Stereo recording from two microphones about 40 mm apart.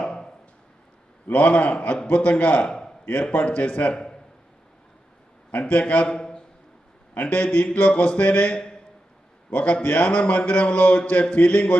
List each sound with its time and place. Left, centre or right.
0.0 s a sound: left
1.3 s a man's voice: left
3.9 s a man's voice: centre
5.5 s a man's voice: left
6.1 s a sound: centre
7.2 s a man's voice: left